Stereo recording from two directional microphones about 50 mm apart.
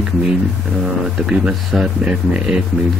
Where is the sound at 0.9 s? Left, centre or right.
Centre.